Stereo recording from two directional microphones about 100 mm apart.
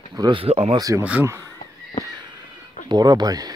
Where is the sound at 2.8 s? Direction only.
45° right (ahead or behind).